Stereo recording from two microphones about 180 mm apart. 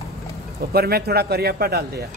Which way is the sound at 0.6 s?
60° right (ahead or behind).